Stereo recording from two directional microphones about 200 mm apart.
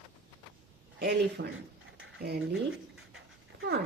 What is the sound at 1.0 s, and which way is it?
Speech, 55° right (ahead or behind).